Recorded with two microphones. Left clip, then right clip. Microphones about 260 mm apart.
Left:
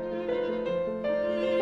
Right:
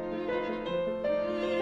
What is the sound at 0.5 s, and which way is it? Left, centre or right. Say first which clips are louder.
Music: left 2 dB; left.